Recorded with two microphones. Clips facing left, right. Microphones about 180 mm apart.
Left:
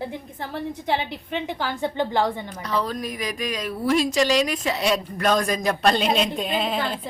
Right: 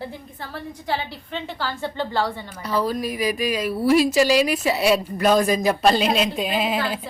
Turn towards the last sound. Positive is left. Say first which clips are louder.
# right 2 dB
turn(degrees=-5)  # may be behind; listen again after turning